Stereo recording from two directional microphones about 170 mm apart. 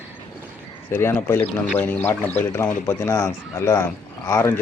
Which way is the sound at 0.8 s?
15° left (ahead or behind).